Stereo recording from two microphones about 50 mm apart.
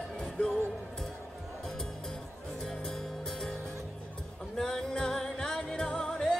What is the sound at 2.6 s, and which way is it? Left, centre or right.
Music, centre.